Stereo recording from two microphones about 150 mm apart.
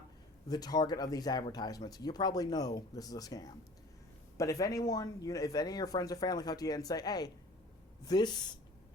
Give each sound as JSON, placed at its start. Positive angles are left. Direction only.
{"t": 0.4, "sound": "speech", "side_deg": 25}